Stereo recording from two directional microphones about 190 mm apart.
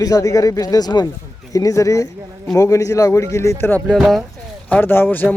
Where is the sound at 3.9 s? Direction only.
Centre (ahead or behind).